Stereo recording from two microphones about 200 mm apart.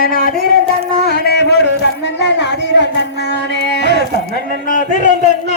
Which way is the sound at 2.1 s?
60° left (ahead or behind).